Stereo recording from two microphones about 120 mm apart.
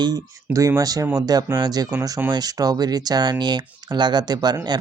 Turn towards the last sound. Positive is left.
turn(degrees=-35)  # may be behind; listen again after turning